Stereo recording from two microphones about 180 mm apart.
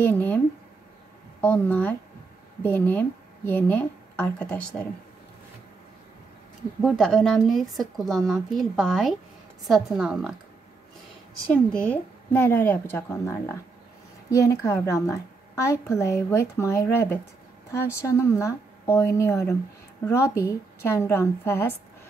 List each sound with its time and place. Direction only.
0.0 s a sound: 10° left (ahead or behind)
1.4 s a woman's voice: 10° left (ahead or behind)
6.8 s speech: centre (ahead or behind)
11.5 s a woman's voice: 10° left (ahead or behind)